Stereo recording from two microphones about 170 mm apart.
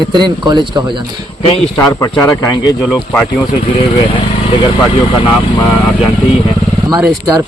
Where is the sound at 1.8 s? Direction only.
20° left (ahead or behind).